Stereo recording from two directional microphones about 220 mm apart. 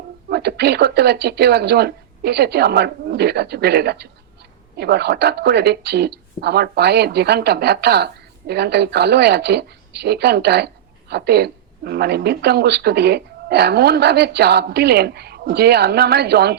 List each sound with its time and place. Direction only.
0.3 s speech: 50° right (ahead or behind)